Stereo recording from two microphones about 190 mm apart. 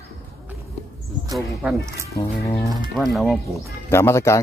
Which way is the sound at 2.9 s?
Centre (ahead or behind).